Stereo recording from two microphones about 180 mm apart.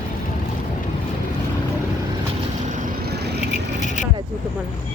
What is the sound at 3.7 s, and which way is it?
Vehicle, 45° left (ahead or behind).